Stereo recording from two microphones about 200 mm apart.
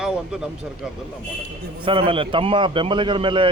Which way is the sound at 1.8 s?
25° right (ahead or behind).